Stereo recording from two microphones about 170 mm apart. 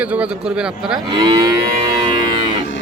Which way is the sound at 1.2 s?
25° right (ahead or behind).